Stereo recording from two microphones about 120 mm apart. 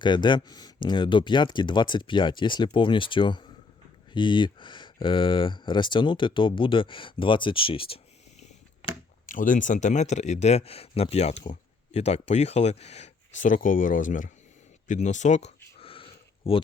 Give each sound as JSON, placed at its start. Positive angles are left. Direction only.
{"t": 0.0, "sound": "speech", "side_deg": 40}
{"t": 9.2, "sound": "speech", "side_deg": 90}
{"t": 14.8, "sound": "a sound", "side_deg": 85}